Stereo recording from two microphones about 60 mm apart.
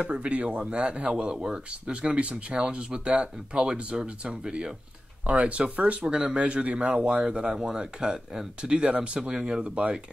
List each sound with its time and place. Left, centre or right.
0.0 s speech: right